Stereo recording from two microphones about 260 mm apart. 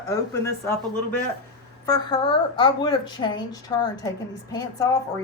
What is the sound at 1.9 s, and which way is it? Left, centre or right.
A woman's voice, centre.